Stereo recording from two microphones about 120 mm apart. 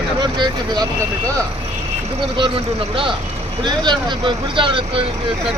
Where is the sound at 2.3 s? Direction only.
45° right (ahead or behind).